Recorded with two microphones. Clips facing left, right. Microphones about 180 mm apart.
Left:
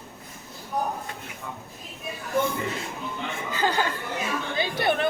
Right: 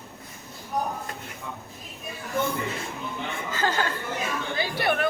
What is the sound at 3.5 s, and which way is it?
Speech, 15° left (ahead or behind).